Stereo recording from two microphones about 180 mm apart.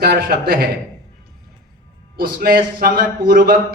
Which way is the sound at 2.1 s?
55° right (ahead or behind).